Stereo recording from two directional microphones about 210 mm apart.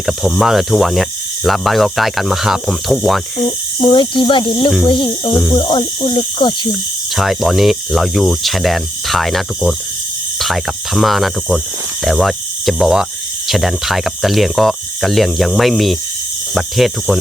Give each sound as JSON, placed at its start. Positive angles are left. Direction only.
{"t": 0.0, "sound": "speech", "side_deg": 0}
{"t": 3.8, "sound": "speech", "side_deg": 20}
{"t": 7.2, "sound": "speech", "side_deg": 0}